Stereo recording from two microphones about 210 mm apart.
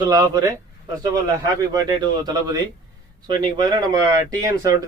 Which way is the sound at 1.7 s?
20° right (ahead or behind).